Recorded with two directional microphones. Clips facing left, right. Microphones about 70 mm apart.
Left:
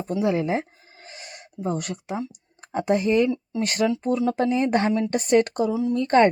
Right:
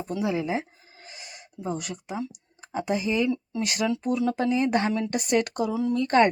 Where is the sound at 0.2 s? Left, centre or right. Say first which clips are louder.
Left 4 dB; left.